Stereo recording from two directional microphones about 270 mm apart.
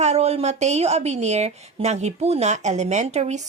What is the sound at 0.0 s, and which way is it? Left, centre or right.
Speech, right.